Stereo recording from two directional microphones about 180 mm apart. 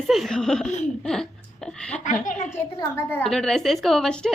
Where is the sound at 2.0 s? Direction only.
45° left (ahead or behind).